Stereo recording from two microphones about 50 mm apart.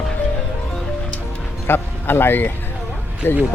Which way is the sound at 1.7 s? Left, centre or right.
Left.